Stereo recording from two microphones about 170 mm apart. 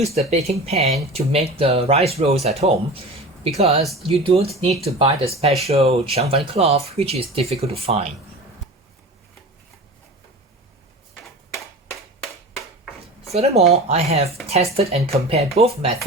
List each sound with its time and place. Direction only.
0.0 s speech: 40° right (ahead or behind)
12.5 s a sound: centre (ahead or behind)
13.3 s speech: 35° right (ahead or behind)